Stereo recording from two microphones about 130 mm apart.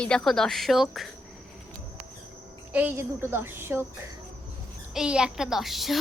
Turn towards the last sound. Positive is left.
turn(degrees=0)  # may be behind; listen again after turning